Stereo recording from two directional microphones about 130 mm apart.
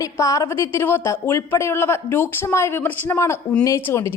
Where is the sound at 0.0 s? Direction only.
25° left (ahead or behind).